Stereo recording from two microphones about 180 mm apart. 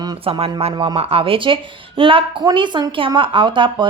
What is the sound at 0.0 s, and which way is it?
A woman's voice, 25° right (ahead or behind).